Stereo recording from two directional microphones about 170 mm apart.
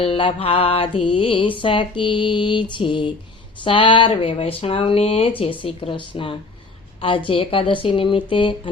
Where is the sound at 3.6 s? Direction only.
30° left (ahead or behind).